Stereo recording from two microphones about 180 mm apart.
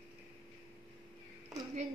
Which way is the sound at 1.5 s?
Centre (ahead or behind).